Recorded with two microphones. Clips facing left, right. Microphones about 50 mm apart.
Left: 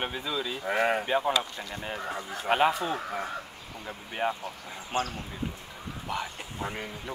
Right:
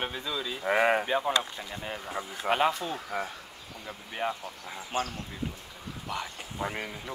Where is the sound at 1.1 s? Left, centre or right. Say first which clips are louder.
Left 2 dB; centre.